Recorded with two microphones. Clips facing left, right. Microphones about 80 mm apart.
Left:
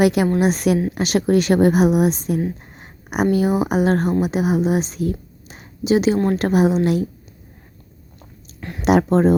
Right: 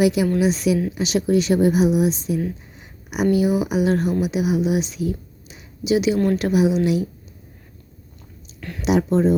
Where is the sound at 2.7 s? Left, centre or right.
Left.